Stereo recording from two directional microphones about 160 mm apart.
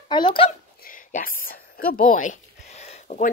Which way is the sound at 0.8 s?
60° left (ahead or behind).